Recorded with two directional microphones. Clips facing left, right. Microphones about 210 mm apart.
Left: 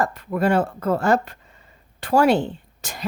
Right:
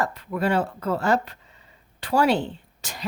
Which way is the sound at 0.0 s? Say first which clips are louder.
Left 4 dB; 45° left (ahead or behind).